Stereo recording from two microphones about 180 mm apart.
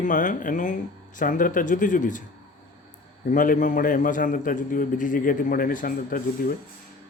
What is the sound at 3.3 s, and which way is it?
Speech, 45° left (ahead or behind).